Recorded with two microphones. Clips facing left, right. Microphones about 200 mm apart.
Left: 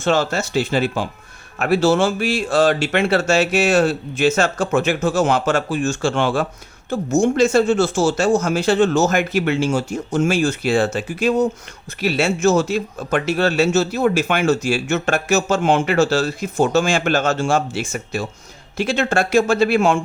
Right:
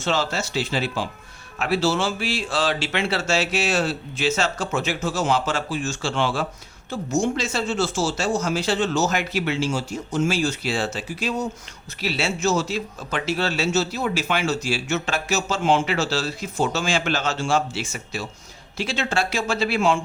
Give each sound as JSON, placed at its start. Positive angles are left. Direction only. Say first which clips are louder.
{"t": 0.0, "sound": "speech", "louder": "left 6 dB", "side_deg": 50}